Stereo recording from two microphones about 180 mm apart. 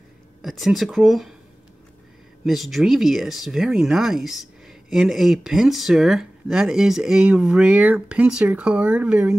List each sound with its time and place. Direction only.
0.4 s speech: centre (ahead or behind)
2.4 s speech: centre (ahead or behind)